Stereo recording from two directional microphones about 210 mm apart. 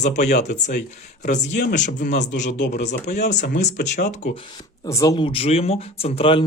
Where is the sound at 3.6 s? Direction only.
35° left (ahead or behind).